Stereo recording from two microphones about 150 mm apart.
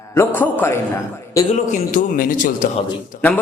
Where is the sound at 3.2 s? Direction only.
10° left (ahead or behind).